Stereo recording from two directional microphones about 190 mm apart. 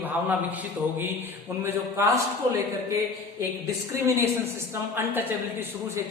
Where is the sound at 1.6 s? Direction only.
15° right (ahead or behind).